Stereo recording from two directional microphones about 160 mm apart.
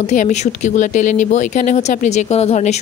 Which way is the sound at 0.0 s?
45° left (ahead or behind).